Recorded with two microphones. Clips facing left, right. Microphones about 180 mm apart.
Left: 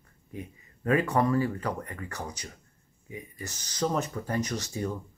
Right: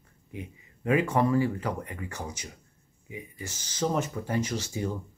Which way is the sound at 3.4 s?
25° right (ahead or behind).